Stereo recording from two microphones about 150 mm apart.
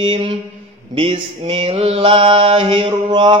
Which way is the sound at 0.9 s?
40° right (ahead or behind).